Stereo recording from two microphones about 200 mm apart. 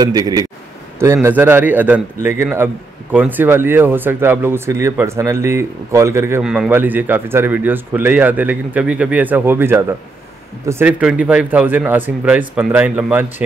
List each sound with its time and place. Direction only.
0.0 s a man's voice: 20° right (ahead or behind)